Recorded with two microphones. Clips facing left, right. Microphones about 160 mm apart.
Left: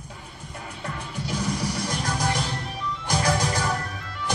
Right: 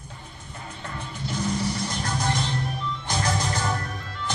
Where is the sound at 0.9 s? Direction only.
10° left (ahead or behind).